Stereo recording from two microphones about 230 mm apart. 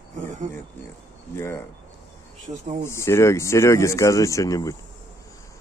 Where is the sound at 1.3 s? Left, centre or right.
Centre.